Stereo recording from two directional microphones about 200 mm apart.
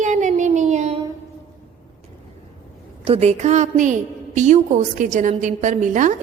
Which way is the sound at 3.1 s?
35° right (ahead or behind).